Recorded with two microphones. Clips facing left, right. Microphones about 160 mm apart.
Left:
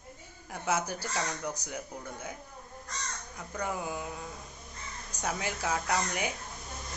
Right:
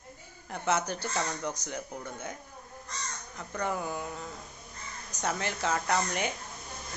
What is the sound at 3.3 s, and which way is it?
Speech, 10° left (ahead or behind).